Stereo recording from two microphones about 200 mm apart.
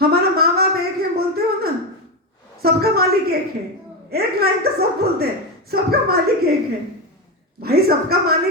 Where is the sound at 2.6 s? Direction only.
50° right (ahead or behind).